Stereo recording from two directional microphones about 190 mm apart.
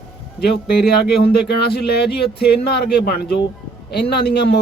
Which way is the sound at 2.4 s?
60° left (ahead or behind).